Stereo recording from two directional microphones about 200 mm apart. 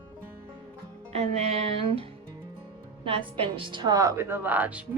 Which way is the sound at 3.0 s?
25° right (ahead or behind).